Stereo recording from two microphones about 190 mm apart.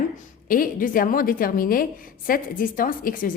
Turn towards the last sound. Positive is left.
turn(degrees=45)  # may be behind; listen again after turning